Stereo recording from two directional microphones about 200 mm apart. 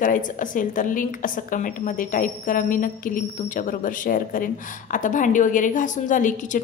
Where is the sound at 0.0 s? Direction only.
40° left (ahead or behind).